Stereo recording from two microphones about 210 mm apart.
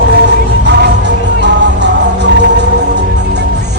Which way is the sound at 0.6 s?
55° right (ahead or behind).